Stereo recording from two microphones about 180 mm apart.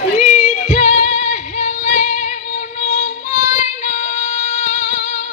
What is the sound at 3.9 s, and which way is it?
Music, 40° left (ahead or behind).